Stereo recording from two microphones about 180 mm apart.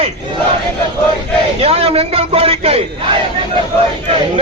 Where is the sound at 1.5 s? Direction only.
35° right (ahead or behind).